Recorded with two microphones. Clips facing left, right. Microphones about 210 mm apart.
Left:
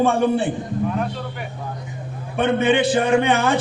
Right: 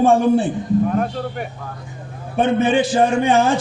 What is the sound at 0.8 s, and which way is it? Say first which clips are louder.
Speech: right 4 dB; 45° right (ahead or behind).